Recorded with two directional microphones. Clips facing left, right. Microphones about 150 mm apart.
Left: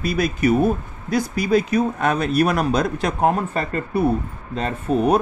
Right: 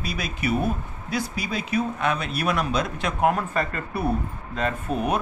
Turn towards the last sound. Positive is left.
turn(degrees=35)  # may be behind; listen again after turning